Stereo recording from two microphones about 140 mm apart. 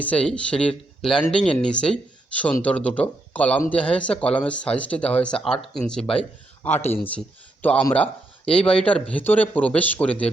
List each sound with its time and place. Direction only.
0.0 s speech: 10° left (ahead or behind)
6.7 s speech: 55° left (ahead or behind)
6.9 s speech: 15° left (ahead or behind)